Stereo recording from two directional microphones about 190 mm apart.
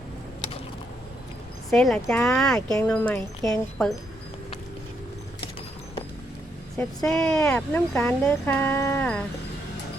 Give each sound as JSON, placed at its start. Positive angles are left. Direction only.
{"t": 1.7, "sound": "speech", "side_deg": 5}
{"t": 3.4, "sound": "speech", "side_deg": 20}
{"t": 6.7, "sound": "speech", "side_deg": 5}